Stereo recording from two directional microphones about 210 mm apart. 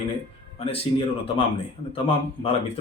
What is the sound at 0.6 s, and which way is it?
Speech, 25° left (ahead or behind).